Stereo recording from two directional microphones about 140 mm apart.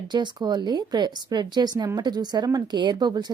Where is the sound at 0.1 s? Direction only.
30° right (ahead or behind).